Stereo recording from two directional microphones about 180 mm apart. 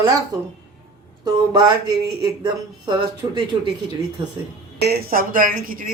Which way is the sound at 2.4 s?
25° right (ahead or behind).